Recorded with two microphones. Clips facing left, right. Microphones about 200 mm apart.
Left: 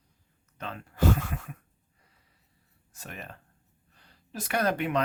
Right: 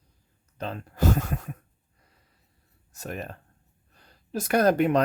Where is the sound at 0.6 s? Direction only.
40° right (ahead or behind).